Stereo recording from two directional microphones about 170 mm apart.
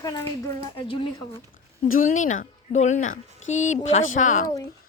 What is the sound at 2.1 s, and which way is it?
A woman's voice, 50° left (ahead or behind).